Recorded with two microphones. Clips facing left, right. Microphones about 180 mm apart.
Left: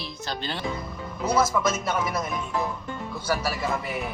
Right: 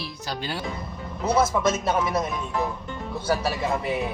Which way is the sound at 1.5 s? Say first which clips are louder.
Right 2 dB; 30° right (ahead or behind).